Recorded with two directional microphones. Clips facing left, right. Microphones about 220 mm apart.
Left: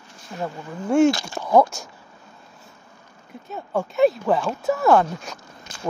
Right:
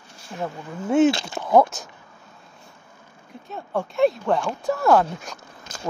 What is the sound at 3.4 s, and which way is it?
Speech, centre (ahead or behind).